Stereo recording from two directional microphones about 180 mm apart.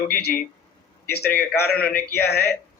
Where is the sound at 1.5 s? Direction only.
60° left (ahead or behind).